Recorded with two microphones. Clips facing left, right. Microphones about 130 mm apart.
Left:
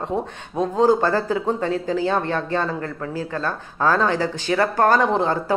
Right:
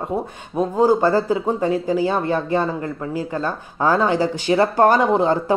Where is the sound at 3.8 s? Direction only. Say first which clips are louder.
Right 2 dB; 15° right (ahead or behind).